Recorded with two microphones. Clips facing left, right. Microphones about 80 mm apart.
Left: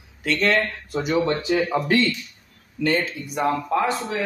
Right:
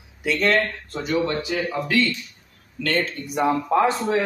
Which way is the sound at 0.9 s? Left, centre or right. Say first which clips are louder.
Left 5 dB; centre.